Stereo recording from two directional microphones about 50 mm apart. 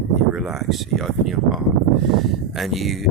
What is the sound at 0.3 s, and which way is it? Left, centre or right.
Speech, centre.